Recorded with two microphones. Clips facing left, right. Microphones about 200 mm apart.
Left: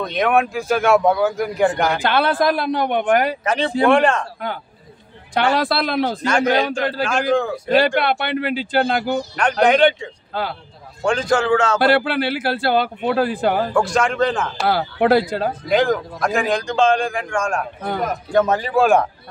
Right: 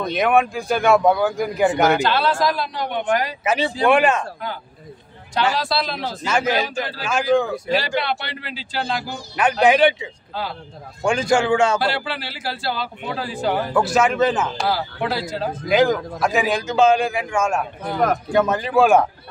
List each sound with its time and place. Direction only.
0.0 s a man's voice: centre (ahead or behind)
2.0 s a man's voice: 55° left (ahead or behind)
3.4 s a man's voice: 5° right (ahead or behind)
5.3 s a man's voice: 55° left (ahead or behind)
6.2 s a man's voice: 5° right (ahead or behind)
7.7 s a man's voice: 55° left (ahead or behind)
9.4 s a man's voice: 5° right (ahead or behind)
10.3 s a man's voice: 55° left (ahead or behind)
11.1 s a man's voice: 10° right (ahead or behind)
11.8 s a man's voice: 55° left (ahead or behind)
13.7 s a man's voice: 5° right (ahead or behind)
14.7 s a man's voice: 55° left (ahead or behind)
15.7 s a man's voice: centre (ahead or behind)